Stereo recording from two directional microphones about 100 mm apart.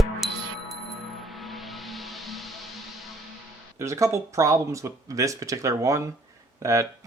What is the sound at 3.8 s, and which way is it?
Speech, 30° right (ahead or behind).